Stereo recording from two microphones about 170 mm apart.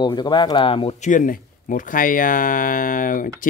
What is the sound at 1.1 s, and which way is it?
Speech, 50° left (ahead or behind).